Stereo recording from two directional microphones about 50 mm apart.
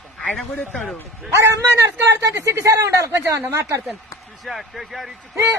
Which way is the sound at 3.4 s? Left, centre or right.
Right.